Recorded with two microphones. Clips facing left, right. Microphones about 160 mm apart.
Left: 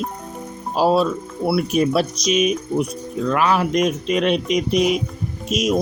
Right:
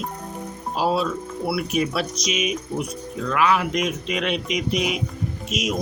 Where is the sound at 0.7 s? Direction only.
40° left (ahead or behind).